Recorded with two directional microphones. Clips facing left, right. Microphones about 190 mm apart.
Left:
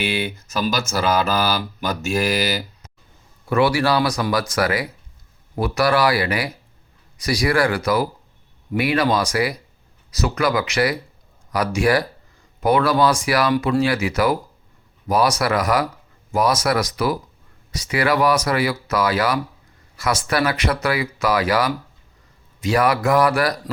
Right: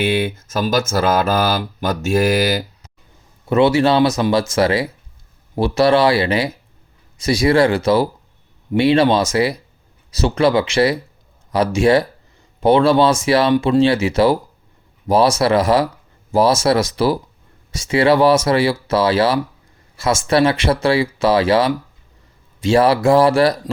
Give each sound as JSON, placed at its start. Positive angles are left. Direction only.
{"t": 0.3, "sound": "speech", "side_deg": -45}
{"t": 3.4, "sound": "speech", "side_deg": -25}